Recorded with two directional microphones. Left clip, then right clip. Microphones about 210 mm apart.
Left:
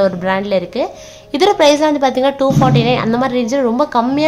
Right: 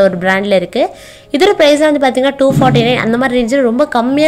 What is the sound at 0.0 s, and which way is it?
A woman's voice, 15° right (ahead or behind).